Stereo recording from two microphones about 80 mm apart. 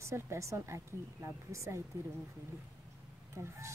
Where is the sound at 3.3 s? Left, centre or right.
Right.